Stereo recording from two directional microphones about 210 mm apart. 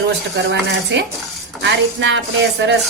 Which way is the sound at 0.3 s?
60° right (ahead or behind).